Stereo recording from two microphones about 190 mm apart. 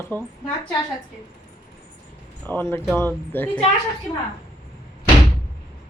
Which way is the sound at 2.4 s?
10° left (ahead or behind).